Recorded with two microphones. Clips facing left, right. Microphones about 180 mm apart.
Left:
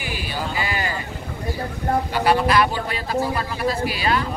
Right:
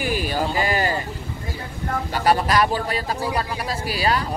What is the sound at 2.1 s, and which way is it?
Speech, 40° right (ahead or behind).